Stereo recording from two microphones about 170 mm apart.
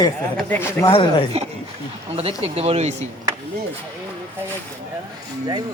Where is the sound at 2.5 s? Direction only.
35° right (ahead or behind).